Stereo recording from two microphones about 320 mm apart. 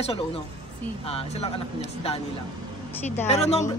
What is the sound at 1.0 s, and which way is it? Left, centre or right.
Speech, centre.